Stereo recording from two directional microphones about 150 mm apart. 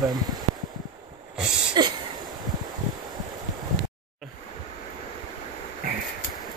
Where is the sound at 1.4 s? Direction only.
5° right (ahead or behind).